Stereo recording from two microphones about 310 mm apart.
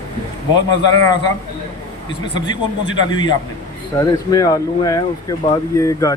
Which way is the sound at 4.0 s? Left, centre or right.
Centre.